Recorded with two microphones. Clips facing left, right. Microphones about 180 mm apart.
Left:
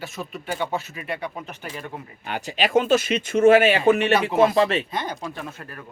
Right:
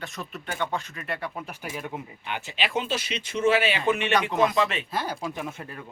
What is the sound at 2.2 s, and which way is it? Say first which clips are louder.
Speech: left 7 dB; 40° left (ahead or behind).